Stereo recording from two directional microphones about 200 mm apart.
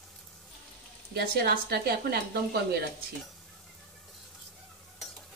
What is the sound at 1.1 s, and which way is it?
Speech, 50° right (ahead or behind).